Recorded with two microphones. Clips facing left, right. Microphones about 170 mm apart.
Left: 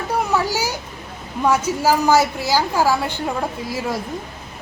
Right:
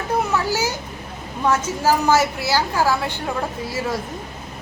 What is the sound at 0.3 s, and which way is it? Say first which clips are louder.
A child's voice: left 1 dB; 10° left (ahead or behind).